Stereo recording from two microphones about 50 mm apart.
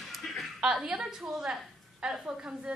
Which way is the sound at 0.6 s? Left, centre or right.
Centre.